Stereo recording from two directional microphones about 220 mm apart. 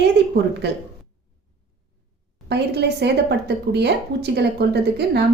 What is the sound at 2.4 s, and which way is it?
A woman's voice, 50° right (ahead or behind).